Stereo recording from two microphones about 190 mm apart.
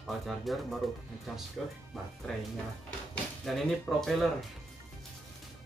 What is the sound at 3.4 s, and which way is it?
Speech, centre (ahead or behind).